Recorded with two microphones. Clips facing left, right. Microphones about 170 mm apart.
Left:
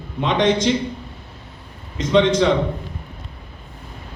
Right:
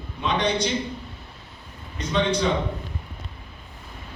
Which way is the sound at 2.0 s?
90° left.